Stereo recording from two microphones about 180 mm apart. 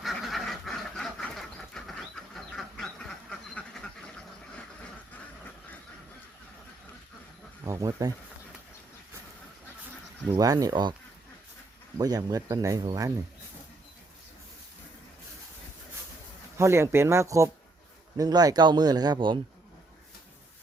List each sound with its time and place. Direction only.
0.0 s duck: centre (ahead or behind)
7.6 s speech: 20° right (ahead or behind)
10.3 s speech: 20° right (ahead or behind)
11.9 s speech: 20° right (ahead or behind)
16.6 s speech: 15° right (ahead or behind)